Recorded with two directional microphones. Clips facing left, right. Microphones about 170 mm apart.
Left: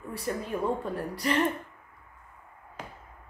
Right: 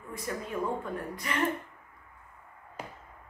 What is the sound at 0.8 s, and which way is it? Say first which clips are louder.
Speech: left 6 dB; 35° left (ahead or behind).